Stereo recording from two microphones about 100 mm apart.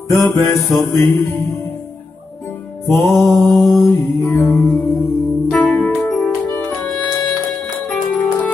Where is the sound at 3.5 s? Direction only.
Centre (ahead or behind).